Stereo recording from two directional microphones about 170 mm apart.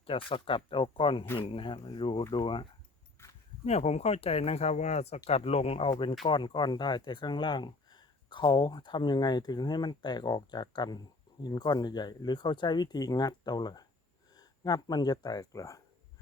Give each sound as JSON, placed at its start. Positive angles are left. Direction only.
{"t": 0.0, "sound": "speech", "side_deg": 30}
{"t": 3.2, "sound": "a sound", "side_deg": 15}
{"t": 3.6, "sound": "speech", "side_deg": 40}